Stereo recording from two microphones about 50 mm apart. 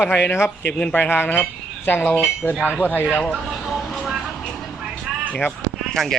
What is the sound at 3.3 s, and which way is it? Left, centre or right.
Vehicle, centre.